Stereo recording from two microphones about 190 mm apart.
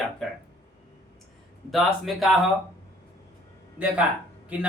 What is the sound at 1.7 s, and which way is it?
Speech, centre (ahead or behind).